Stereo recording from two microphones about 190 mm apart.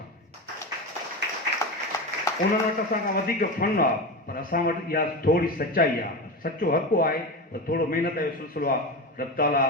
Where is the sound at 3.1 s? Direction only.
50° left (ahead or behind).